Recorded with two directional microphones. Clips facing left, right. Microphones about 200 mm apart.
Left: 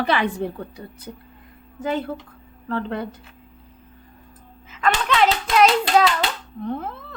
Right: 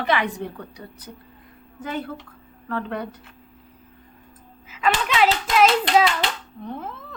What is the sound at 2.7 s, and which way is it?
Speech, 30° left (ahead or behind).